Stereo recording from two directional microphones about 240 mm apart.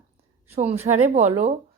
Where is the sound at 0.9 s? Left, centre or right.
Right.